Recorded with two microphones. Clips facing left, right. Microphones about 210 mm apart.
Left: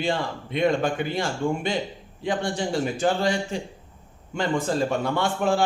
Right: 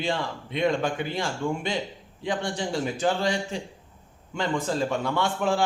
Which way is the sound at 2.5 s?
50° left (ahead or behind).